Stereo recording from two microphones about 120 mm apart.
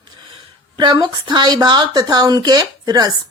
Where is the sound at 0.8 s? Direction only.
40° right (ahead or behind).